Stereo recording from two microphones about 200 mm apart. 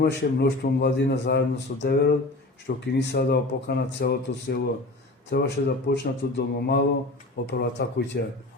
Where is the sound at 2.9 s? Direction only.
55° left (ahead or behind).